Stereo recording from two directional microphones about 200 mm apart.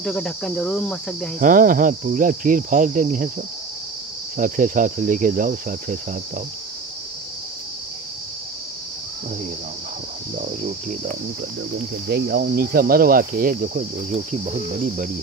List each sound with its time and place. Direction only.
0.0 s speech: centre (ahead or behind)
1.4 s speech: 40° right (ahead or behind)
4.4 s cricket: 40° right (ahead or behind)
10.3 s speech: 40° right (ahead or behind)
12.1 s speech: 55° right (ahead or behind)
14.1 s cricket: 35° right (ahead or behind)